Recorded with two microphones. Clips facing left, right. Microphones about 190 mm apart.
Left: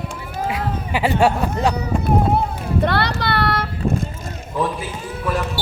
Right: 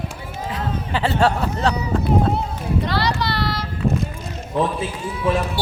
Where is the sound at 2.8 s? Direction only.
60° left (ahead or behind).